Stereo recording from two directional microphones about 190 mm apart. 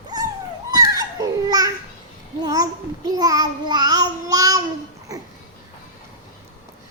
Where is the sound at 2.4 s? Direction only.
20° right (ahead or behind).